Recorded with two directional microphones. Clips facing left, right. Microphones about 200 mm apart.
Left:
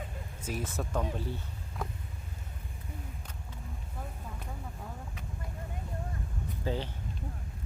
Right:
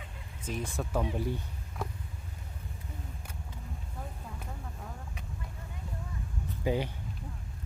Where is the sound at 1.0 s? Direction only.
15° right (ahead or behind).